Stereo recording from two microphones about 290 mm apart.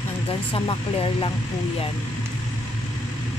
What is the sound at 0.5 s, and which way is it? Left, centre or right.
Speech, centre.